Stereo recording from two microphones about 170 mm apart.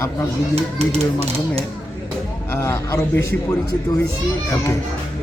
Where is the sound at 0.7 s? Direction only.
40° right (ahead or behind).